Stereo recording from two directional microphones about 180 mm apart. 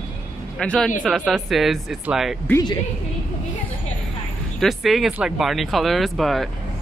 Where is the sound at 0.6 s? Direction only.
5° left (ahead or behind).